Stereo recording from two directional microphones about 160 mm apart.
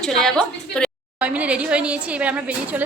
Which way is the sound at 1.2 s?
10° right (ahead or behind).